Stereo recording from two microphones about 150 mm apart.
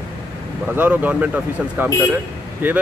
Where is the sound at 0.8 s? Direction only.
10° right (ahead or behind).